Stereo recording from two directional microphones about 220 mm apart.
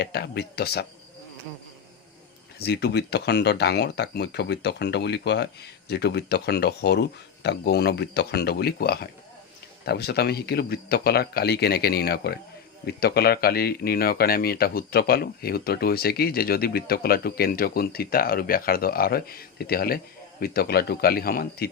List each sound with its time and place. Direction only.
0.0 s speech: 50° left (ahead or behind)
2.6 s speech: 50° left (ahead or behind)